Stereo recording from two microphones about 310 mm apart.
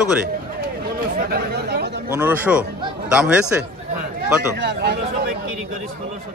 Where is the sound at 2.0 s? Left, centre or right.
Centre.